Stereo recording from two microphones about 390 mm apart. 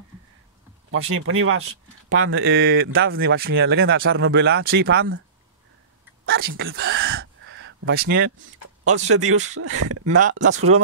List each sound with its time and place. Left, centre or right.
1.0 s speech: right
6.2 s a sound: right
9.0 s speech: right